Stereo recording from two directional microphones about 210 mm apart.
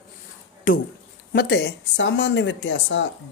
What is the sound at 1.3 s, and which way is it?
Speech, 55° left (ahead or behind).